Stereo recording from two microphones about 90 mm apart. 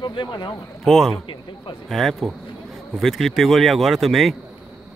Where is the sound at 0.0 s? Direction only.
60° left (ahead or behind).